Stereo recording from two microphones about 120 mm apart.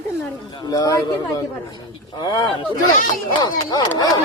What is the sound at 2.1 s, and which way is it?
Speech, 35° left (ahead or behind).